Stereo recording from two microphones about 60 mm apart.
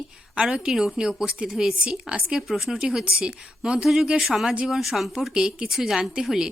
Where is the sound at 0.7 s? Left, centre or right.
Centre.